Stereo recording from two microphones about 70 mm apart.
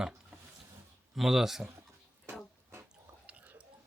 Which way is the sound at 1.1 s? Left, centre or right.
Centre.